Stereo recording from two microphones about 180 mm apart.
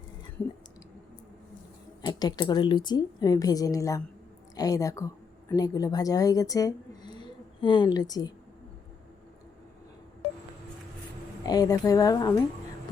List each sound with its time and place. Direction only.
2.0 s a woman's voice: 25° left (ahead or behind)
7.2 s a sound: 25° left (ahead or behind)
11.4 s a woman's voice: 20° left (ahead or behind)